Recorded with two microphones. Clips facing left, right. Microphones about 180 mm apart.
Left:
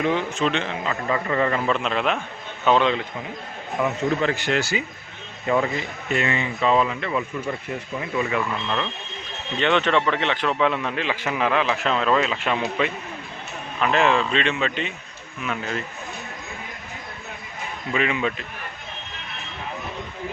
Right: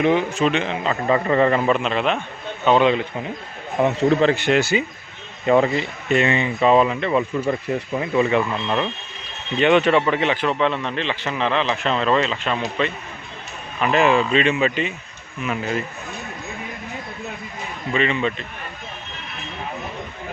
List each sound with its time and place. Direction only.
0.0 s speech: 15° right (ahead or behind)
0.7 s speech: 30° right (ahead or behind)
1.8 s a man's voice: centre (ahead or behind)
2.6 s speech: 10° right (ahead or behind)
3.8 s speech: 30° right (ahead or behind)
7.1 s speech: 35° right (ahead or behind)
9.6 s a man's voice: 10° right (ahead or behind); by 12.9 s 10° left (ahead or behind)
13.7 s a man's voice: 5° right (ahead or behind)
17.9 s a man's voice: 5° left (ahead or behind)